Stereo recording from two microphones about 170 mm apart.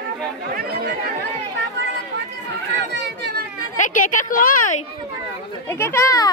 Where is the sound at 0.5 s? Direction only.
65° right (ahead or behind).